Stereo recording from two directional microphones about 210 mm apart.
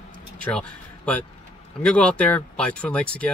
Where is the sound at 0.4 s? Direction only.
5° left (ahead or behind).